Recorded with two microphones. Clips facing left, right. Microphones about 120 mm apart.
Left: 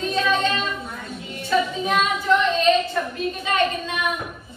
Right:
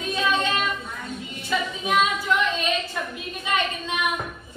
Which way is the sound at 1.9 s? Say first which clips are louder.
Right 2 dB; centre (ahead or behind).